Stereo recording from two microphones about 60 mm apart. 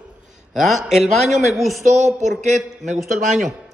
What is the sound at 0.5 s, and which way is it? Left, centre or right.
Speech, centre.